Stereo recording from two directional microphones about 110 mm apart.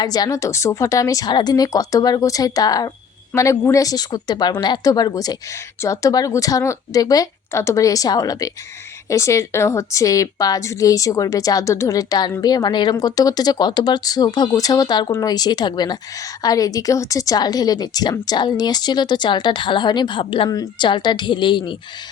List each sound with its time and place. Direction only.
0.0 s a woman's voice: 35° left (ahead or behind)
20.5 s a woman's voice: 40° left (ahead or behind)